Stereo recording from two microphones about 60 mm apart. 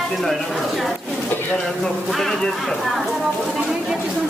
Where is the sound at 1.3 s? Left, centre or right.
Left.